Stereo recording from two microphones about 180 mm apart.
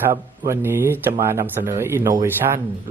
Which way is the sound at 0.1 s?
15° right (ahead or behind).